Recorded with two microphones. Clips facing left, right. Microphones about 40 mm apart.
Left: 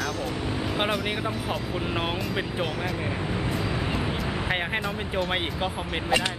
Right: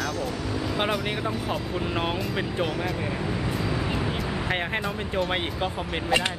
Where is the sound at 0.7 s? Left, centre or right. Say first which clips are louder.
Even; centre.